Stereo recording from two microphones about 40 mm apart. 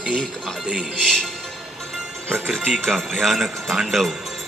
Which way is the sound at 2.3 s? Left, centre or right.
Centre.